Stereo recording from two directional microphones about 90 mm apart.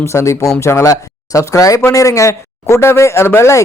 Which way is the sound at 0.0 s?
35° left (ahead or behind).